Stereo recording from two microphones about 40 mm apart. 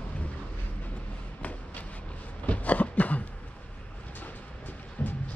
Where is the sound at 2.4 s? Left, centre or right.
Left.